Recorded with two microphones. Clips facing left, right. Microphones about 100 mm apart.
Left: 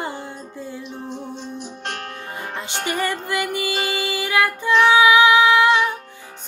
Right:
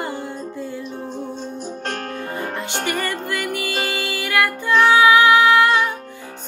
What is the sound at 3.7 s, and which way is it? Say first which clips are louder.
Music: even; 50° right (ahead or behind).